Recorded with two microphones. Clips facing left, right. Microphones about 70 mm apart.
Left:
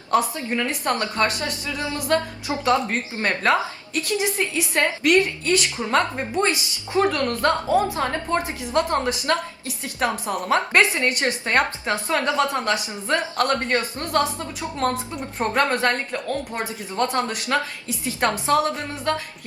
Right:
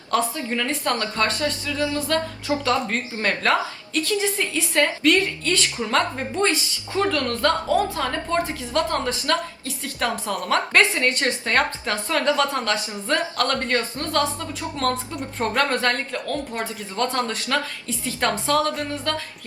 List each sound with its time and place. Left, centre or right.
0.1 s a woman's voice: left